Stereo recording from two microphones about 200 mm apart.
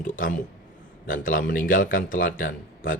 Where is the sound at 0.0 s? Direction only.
40° left (ahead or behind).